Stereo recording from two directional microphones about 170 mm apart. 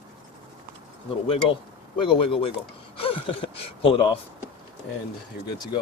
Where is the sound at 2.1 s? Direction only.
30° left (ahead or behind).